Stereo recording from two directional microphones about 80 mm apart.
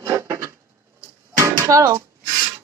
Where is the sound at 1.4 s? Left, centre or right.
Right.